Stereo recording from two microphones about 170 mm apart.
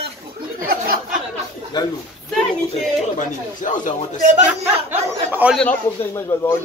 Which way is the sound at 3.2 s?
50° left (ahead or behind).